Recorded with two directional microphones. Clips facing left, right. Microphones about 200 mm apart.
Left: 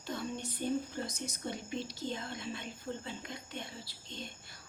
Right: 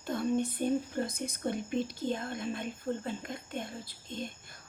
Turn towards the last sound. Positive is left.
turn(degrees=-50)  # may be behind; listen again after turning